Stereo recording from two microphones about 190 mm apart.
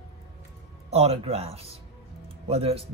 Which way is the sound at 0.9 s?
30° right (ahead or behind).